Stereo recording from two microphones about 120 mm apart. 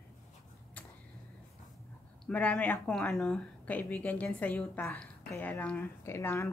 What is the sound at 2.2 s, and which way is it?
Speech, 10° left (ahead or behind).